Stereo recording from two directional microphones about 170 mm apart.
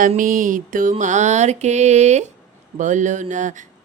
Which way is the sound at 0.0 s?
50° right (ahead or behind).